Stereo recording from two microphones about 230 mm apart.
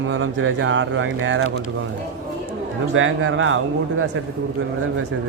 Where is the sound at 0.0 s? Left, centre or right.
Right.